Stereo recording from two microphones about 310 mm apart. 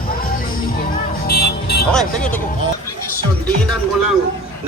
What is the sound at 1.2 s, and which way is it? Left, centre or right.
Music, left.